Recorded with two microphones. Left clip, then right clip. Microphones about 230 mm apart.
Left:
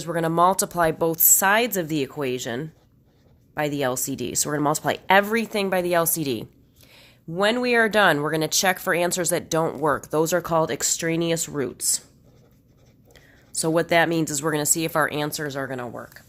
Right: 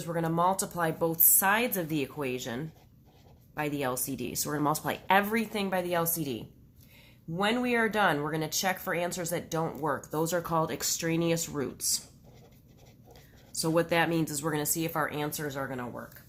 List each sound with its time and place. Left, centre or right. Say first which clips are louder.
0.0 s speech: left 8 dB; left
13.6 s speech: left 7 dB; left